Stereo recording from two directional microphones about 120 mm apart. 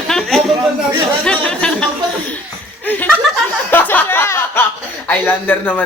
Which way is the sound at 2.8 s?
15° left (ahead or behind).